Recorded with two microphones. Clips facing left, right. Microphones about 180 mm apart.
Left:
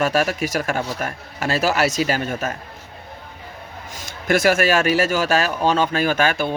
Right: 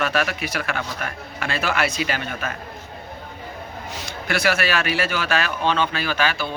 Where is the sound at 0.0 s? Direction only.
40° left (ahead or behind).